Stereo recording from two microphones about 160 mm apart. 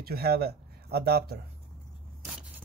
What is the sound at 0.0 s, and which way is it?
Speech, 75° right (ahead or behind).